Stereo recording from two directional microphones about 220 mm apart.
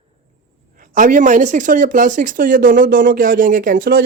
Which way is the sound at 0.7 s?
35° right (ahead or behind).